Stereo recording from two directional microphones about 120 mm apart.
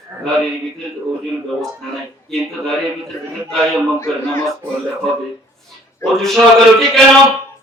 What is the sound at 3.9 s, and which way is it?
Speech, 25° left (ahead or behind).